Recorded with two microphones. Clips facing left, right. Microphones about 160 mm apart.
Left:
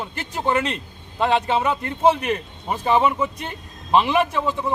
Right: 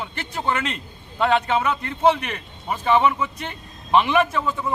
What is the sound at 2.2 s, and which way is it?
A man's voice, 35° left (ahead or behind).